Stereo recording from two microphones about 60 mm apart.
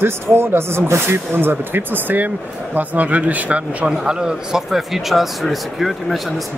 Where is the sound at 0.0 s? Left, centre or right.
Right.